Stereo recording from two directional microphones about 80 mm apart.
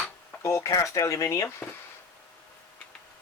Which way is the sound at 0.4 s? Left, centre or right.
Left.